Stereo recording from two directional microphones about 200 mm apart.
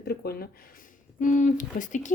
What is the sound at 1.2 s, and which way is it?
Speech, 40° left (ahead or behind).